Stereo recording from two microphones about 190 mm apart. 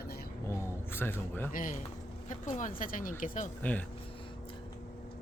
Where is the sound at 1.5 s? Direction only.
45° left (ahead or behind).